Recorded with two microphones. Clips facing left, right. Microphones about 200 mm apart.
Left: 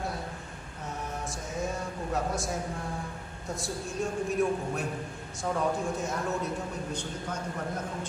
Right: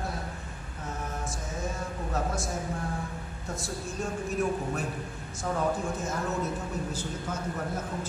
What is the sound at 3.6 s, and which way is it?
A man's voice, centre (ahead or behind).